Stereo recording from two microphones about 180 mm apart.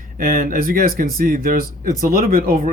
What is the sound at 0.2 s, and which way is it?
Speech, 55° right (ahead or behind).